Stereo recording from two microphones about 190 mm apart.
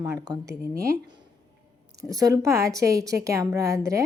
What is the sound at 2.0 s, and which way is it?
A woman's voice, 20° right (ahead or behind).